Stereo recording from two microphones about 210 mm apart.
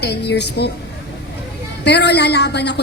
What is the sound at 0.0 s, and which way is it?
Speech, 50° left (ahead or behind).